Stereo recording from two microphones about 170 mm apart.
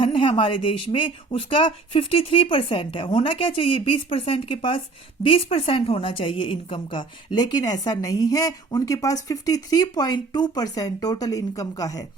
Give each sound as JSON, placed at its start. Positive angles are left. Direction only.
{"t": 0.0, "sound": "a woman's voice", "side_deg": 30}